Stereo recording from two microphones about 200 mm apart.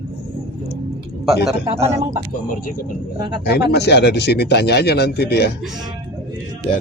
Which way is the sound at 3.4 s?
55° left (ahead or behind).